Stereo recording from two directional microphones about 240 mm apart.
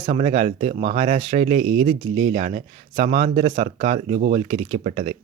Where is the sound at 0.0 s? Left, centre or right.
Right.